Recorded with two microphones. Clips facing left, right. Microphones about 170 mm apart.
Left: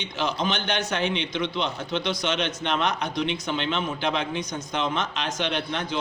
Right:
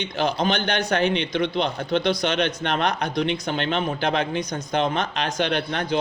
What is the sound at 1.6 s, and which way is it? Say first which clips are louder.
A man's voice: right 5 dB; 55° right (ahead or behind).